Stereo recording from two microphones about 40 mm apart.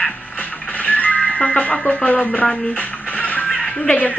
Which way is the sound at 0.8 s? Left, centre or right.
Left.